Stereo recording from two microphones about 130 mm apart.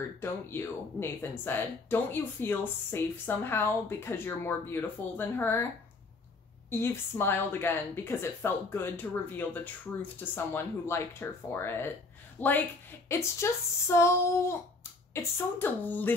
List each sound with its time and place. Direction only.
0.2 s speech: 15° left (ahead or behind)
6.7 s a woman's voice: 20° left (ahead or behind)